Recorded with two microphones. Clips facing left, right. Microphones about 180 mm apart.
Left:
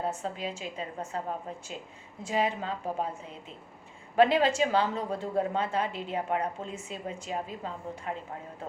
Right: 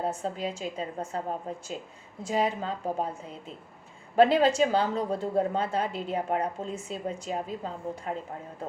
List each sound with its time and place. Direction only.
0.0 s a woman's voice: 35° right (ahead or behind)
4.1 s a woman's voice: 40° right (ahead or behind)